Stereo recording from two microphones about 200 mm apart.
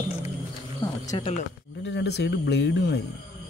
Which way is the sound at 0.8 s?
20° left (ahead or behind).